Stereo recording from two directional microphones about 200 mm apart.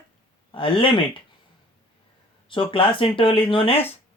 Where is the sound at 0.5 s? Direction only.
25° left (ahead or behind).